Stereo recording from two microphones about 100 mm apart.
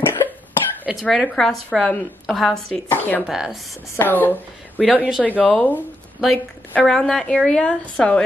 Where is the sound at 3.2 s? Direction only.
5° right (ahead or behind).